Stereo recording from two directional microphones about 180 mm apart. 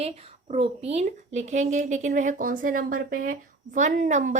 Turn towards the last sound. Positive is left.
turn(degrees=-40)  # may be behind; listen again after turning